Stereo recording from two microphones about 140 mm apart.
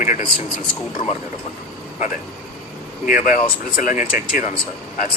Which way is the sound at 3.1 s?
70° left (ahead or behind).